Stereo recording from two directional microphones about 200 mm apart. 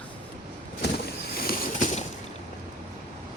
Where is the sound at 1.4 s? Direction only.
45° left (ahead or behind).